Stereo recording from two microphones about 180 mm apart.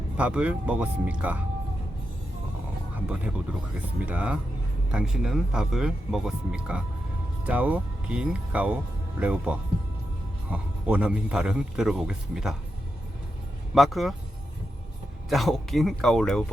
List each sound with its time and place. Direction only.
0.2 s speech: 5° right (ahead or behind)
2.9 s music: 5° right (ahead or behind)
4.0 s a man's voice: 5° right (ahead or behind)
13.7 s a man's voice: centre (ahead or behind)
15.3 s a man's voice: centre (ahead or behind)